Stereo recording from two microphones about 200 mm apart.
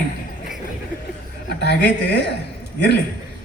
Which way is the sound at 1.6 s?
55° left (ahead or behind).